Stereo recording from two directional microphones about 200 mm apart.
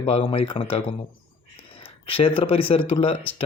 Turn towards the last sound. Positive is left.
turn(degrees=30)  # may be behind; listen again after turning